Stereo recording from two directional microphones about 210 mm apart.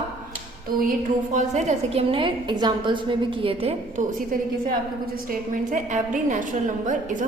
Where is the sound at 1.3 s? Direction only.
35° right (ahead or behind).